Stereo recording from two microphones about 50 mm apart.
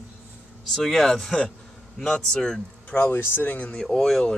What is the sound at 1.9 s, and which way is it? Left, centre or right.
Speech, centre.